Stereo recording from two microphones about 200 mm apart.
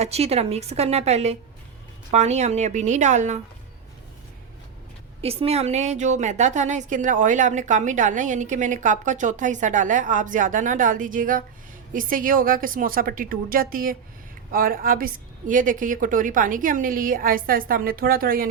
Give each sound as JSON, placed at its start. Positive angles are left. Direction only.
{"t": 0.0, "sound": "a woman's voice", "side_deg": -30}
{"t": 5.2, "sound": "a woman's voice", "side_deg": -30}